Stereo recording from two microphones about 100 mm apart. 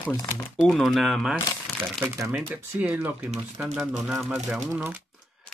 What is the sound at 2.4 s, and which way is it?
Speech, 15° right (ahead or behind).